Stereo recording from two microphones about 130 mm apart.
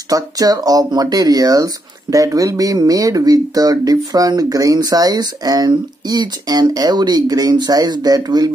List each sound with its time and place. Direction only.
0.1 s speech: 30° right (ahead or behind)